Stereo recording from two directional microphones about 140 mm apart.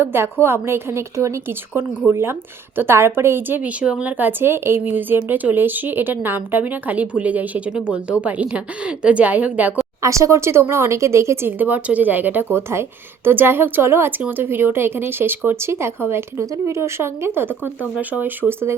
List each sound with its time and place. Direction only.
0.0 s a woman's voice: 15° right (ahead or behind)
10.0 s a woman's voice: 20° right (ahead or behind)